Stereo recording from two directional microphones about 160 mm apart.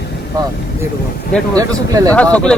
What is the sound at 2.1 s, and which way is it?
Speech, 10° left (ahead or behind).